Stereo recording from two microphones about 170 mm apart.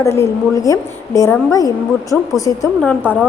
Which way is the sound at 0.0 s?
15° left (ahead or behind).